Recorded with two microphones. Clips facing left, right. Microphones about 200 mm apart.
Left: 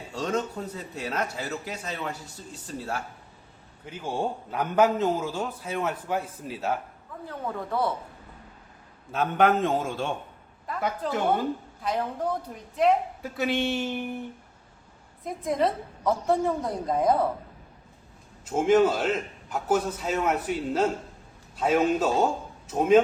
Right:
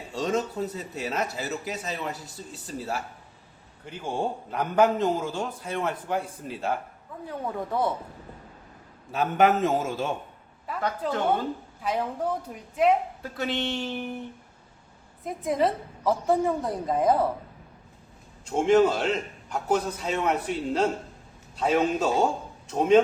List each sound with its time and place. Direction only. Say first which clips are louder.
0.1 s a man's voice: right 2 dB; centre (ahead or behind)
7.3 s a woman's voice: right 1 dB; 15° right (ahead or behind)
9.1 s a man's voice: right 1 dB; centre (ahead or behind)
11.8 s a woman's voice: right 1 dB; 5° right (ahead or behind)
13.3 s a man's voice: left 3 dB; 5° left (ahead or behind)
15.2 s a man's voice: right 1 dB; centre (ahead or behind)
18.4 s a man's voice: even; 5° left (ahead or behind)